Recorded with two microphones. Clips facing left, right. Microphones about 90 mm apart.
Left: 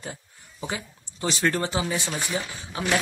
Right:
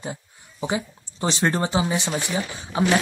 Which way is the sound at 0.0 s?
20° right (ahead or behind).